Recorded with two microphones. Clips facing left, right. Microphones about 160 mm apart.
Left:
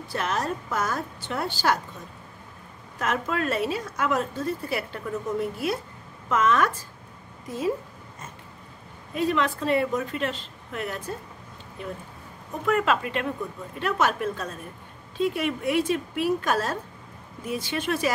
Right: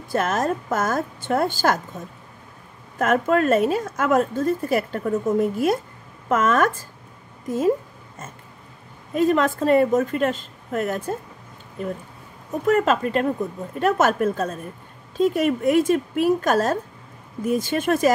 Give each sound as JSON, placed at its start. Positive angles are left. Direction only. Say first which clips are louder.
{"t": 0.1, "sound": "a woman's voice", "louder": "right 6 dB", "side_deg": -45}
{"t": 3.0, "sound": "a woman's voice", "louder": "right 8 dB", "side_deg": -50}
{"t": 9.1, "sound": "a woman's voice", "louder": "right 6 dB", "side_deg": -45}